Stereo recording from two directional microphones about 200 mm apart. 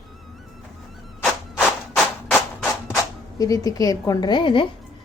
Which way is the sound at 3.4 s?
20° left (ahead or behind).